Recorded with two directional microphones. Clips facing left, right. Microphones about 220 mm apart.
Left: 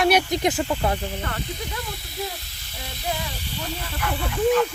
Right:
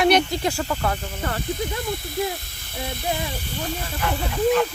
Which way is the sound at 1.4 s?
50° right (ahead or behind).